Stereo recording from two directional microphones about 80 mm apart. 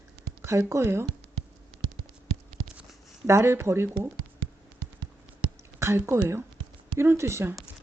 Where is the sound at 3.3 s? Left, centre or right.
Right.